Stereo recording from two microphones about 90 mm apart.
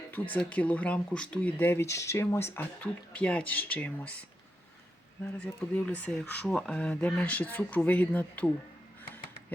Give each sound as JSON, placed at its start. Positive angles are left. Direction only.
{"t": 0.3, "sound": "speech", "side_deg": 15}
{"t": 1.5, "sound": "speech", "side_deg": 25}
{"t": 2.8, "sound": "speech", "side_deg": 15}
{"t": 5.4, "sound": "speech", "side_deg": 10}